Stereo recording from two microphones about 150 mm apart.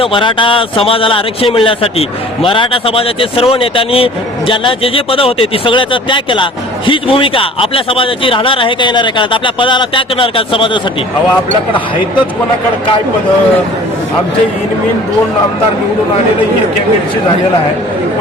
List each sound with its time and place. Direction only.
0.0 s speech: 35° left (ahead or behind)